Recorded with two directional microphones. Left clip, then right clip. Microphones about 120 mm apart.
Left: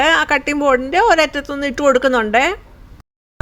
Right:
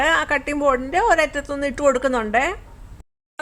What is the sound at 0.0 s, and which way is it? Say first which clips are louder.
A woman's voice: left 5 dB; 30° left (ahead or behind).